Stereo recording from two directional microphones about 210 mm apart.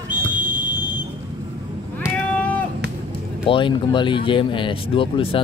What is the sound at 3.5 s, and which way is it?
Speech, 25° left (ahead or behind).